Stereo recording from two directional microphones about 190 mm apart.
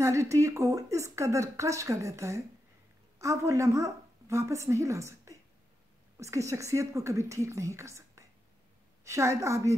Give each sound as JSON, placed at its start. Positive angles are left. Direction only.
{"t": 0.0, "sound": "a woman's voice", "side_deg": -15}